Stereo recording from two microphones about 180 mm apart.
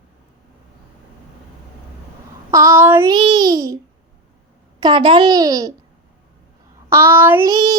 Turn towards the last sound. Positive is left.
turn(degrees=-20)  # may be behind; listen again after turning